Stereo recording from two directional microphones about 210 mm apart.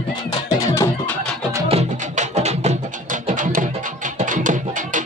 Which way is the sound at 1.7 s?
30° right (ahead or behind).